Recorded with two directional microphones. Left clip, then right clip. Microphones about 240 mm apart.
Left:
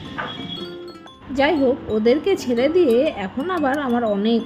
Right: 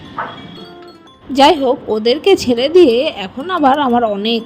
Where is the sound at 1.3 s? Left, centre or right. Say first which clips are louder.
Right 8 dB; right.